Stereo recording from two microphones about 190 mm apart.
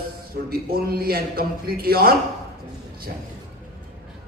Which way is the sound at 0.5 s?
55° right (ahead or behind).